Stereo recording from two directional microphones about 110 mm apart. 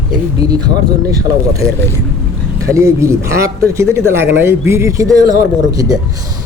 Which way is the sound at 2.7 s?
25° right (ahead or behind).